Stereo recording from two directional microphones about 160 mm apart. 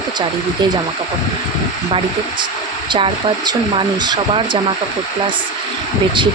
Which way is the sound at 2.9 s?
30° right (ahead or behind).